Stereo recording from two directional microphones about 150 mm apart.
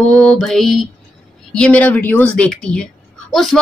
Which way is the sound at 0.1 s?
5° left (ahead or behind).